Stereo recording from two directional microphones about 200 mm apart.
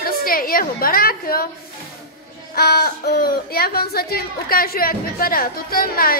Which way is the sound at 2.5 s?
50° left (ahead or behind).